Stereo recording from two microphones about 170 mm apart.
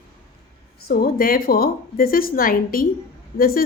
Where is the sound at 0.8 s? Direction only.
65° left (ahead or behind).